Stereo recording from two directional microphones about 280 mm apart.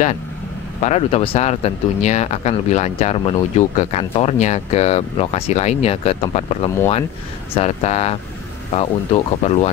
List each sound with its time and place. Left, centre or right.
0.8 s speech: left